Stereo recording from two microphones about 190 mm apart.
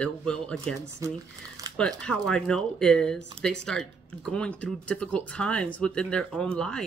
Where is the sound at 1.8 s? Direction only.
5° left (ahead or behind).